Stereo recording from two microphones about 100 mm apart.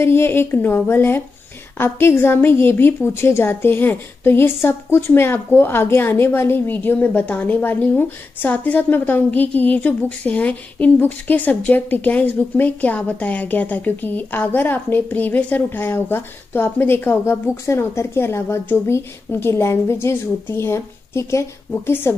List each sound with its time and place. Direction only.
0.0 s a woman's voice: 25° left (ahead or behind)